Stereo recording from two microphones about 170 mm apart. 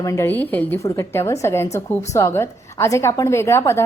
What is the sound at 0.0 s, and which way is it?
Speech, 15° left (ahead or behind).